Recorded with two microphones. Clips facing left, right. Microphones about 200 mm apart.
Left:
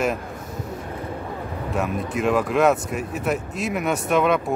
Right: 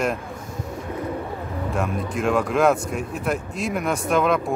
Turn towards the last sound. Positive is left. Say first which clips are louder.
# left 1 dB
turn(degrees=0)  # may be behind; listen again after turning